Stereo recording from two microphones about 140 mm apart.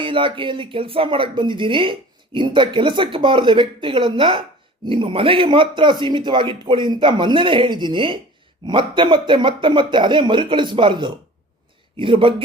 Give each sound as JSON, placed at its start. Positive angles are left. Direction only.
{"t": 0.0, "sound": "speech", "side_deg": -35}